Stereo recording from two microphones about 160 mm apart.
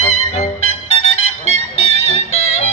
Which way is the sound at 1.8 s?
45° left (ahead or behind).